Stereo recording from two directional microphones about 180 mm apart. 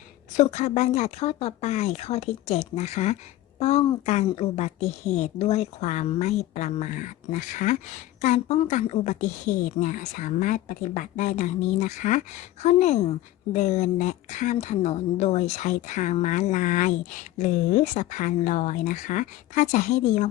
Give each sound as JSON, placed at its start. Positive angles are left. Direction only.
{"t": 0.3, "sound": "a woman's voice", "side_deg": 40}